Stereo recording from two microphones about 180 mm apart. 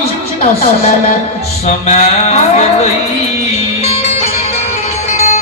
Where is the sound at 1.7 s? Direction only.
40° left (ahead or behind).